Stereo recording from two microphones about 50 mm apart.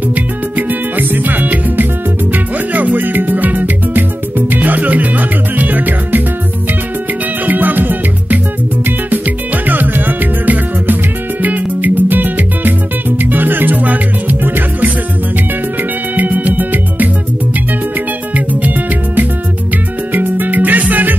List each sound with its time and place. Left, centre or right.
0.1 s music: right
7.4 s music: right
9.7 s music: right
16.2 s music: right
18.3 s music: right
20.1 s music: right